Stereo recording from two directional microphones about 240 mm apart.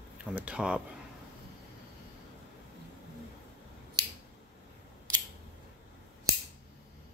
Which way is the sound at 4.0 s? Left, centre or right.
Centre.